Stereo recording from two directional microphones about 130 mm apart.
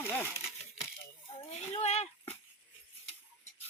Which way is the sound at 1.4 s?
55° left (ahead or behind).